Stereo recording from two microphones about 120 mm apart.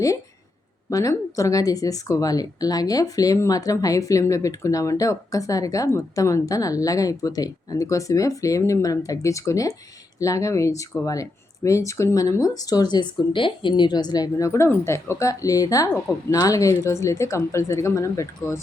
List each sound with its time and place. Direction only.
0.9 s speech: 25° left (ahead or behind)